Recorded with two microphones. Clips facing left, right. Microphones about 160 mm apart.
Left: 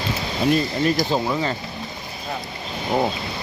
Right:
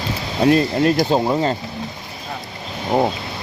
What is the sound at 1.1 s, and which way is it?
Speech, 35° right (ahead or behind).